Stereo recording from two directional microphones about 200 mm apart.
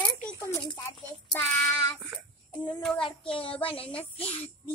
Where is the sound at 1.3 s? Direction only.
10° left (ahead or behind).